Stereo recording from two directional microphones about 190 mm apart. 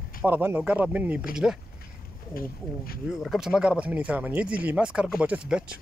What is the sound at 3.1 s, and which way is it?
Speech, centre (ahead or behind).